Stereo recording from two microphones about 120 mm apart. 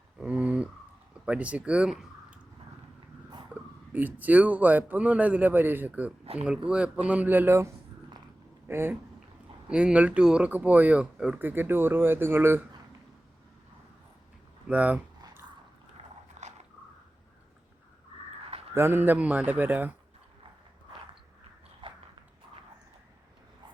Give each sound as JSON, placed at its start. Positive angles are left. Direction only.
{"t": 0.2, "sound": "a sound", "side_deg": -10}
{"t": 1.2, "sound": "speech", "side_deg": -10}
{"t": 3.5, "sound": "speech", "side_deg": -15}
{"t": 14.7, "sound": "speech", "side_deg": -10}
{"t": 16.4, "sound": "a sound", "side_deg": -80}
{"t": 18.7, "sound": "speech", "side_deg": -20}
{"t": 21.8, "sound": "biting", "side_deg": -45}